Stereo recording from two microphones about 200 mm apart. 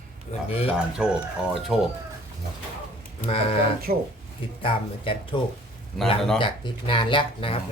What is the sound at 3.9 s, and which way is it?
Speech, 45° right (ahead or behind).